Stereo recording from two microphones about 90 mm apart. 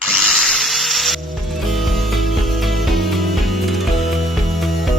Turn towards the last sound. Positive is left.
turn(degrees=0)  # may be behind; listen again after turning